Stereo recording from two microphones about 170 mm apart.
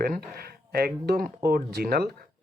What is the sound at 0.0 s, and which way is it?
Speech, 65° right (ahead or behind).